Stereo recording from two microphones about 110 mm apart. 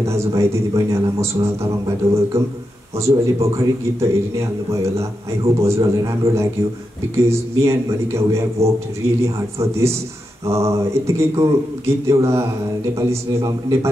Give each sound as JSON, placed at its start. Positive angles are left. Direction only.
{"t": 0.0, "sound": "a man's voice", "side_deg": -25}